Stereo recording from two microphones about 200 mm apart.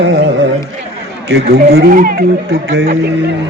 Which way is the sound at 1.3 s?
55° right (ahead or behind).